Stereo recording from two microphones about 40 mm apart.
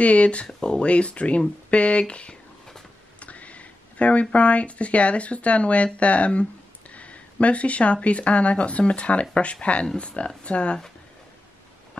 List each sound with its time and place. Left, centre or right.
0.0 s speech: left